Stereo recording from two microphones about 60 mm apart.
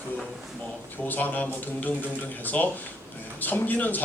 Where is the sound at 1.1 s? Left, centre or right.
Left.